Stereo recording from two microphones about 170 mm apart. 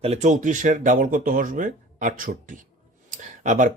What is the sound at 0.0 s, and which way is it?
Speech, 40° right (ahead or behind).